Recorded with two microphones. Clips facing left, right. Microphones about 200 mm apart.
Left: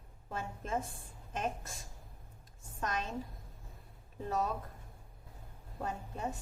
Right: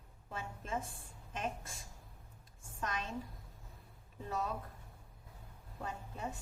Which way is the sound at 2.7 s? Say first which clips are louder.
Left 3 dB; 45° left (ahead or behind).